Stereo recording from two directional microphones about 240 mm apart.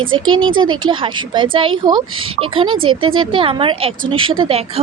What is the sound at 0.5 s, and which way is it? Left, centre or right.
A woman's voice, centre.